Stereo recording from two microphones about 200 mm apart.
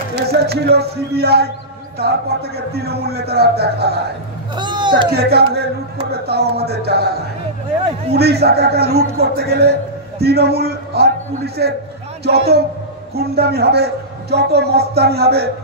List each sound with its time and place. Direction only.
0.1 s a woman's voice: 55° right (ahead or behind)
4.6 s speech: 20° right (ahead or behind)
5.1 s a woman's voice: 55° right (ahead or behind)
8.1 s a woman's voice: 55° right (ahead or behind)